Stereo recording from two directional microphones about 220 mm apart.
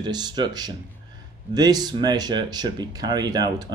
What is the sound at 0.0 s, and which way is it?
Speech, 20° right (ahead or behind).